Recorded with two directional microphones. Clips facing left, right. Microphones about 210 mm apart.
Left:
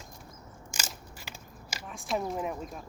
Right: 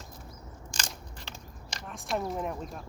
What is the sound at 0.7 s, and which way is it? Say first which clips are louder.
Crushing: right 1 dB; 5° left (ahead or behind).